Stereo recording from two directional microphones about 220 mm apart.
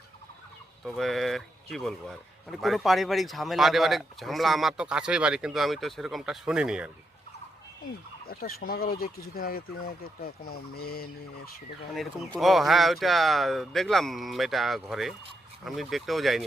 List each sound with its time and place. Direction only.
0.9 s a man's voice: centre (ahead or behind)
8.3 s fowl: 40° left (ahead or behind)
12.4 s a man's voice: centre (ahead or behind)